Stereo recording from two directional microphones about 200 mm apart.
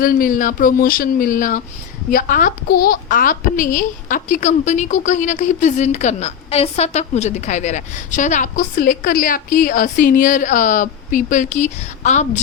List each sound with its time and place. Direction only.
0.0 s a woman's voice: 40° left (ahead or behind)